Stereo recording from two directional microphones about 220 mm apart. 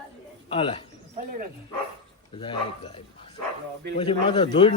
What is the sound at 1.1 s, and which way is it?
Dog, 35° right (ahead or behind).